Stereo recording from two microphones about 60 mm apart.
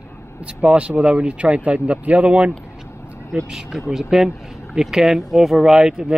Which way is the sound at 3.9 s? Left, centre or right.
Centre.